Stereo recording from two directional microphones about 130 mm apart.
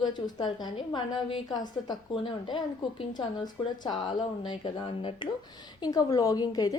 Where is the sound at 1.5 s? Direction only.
30° left (ahead or behind).